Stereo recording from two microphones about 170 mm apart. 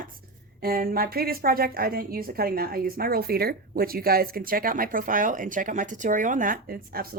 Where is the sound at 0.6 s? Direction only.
60° right (ahead or behind).